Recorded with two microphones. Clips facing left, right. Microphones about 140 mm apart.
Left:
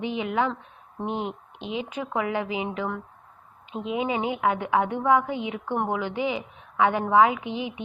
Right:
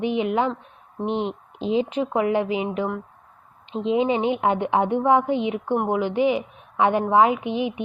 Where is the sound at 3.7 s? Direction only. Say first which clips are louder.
Right 6 dB; 25° right (ahead or behind).